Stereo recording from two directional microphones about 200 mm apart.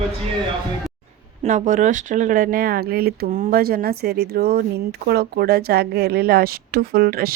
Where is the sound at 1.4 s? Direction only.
40° right (ahead or behind).